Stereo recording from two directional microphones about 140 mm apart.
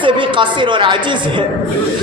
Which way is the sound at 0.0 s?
35° right (ahead or behind).